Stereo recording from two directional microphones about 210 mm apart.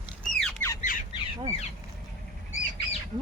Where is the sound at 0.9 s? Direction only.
40° left (ahead or behind).